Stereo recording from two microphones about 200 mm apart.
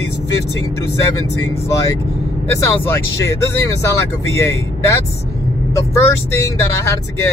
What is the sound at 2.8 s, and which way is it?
Speech, 15° left (ahead or behind).